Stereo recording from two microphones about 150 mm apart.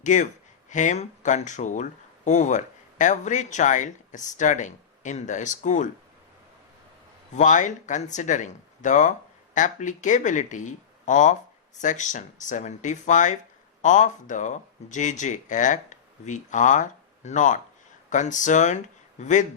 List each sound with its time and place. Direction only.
0.0 s speech: 55° left (ahead or behind)
7.3 s speech: 55° left (ahead or behind)